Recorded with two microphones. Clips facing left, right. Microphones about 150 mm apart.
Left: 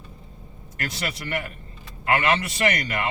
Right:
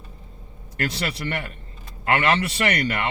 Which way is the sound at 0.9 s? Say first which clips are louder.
Right 2 dB; 30° right (ahead or behind).